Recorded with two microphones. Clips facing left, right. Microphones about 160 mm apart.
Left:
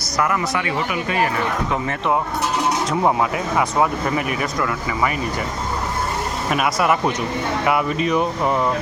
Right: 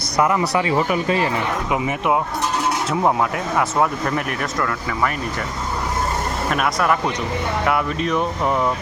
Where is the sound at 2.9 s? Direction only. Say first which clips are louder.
Right 1 dB; centre (ahead or behind).